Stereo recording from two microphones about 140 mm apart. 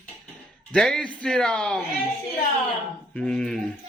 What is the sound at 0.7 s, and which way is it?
Speech, 5° left (ahead or behind).